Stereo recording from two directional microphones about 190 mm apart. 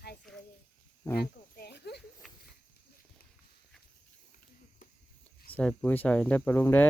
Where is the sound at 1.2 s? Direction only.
55° left (ahead or behind).